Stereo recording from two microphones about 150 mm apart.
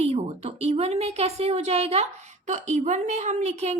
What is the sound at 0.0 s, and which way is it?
A woman's voice, 45° right (ahead or behind).